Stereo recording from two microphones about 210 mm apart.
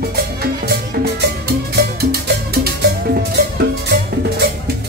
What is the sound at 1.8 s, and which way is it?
Music, 50° right (ahead or behind).